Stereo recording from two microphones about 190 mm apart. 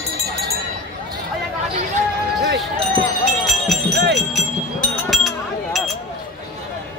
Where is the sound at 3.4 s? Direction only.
Centre (ahead or behind).